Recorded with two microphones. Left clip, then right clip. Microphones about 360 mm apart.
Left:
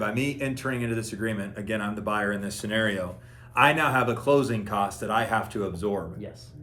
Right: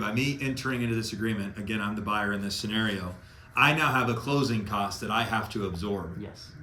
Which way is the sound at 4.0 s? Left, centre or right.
Centre.